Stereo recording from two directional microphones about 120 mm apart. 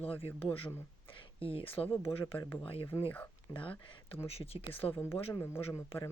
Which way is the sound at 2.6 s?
50° left (ahead or behind).